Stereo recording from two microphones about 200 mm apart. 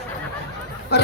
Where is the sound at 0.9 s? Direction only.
55° left (ahead or behind).